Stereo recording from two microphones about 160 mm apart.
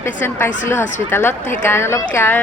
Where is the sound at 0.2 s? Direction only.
15° left (ahead or behind).